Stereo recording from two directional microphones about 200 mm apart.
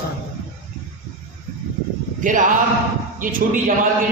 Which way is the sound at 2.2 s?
40° right (ahead or behind).